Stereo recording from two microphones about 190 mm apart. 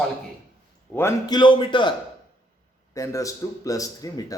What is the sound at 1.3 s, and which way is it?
A man's voice, 25° left (ahead or behind).